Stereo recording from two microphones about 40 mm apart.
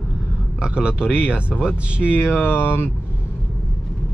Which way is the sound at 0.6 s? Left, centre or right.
Right.